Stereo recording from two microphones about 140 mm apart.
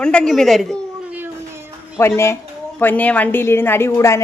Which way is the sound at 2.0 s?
20° left (ahead or behind).